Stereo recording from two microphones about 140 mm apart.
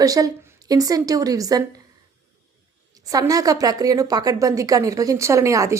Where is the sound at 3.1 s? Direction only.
25° right (ahead or behind).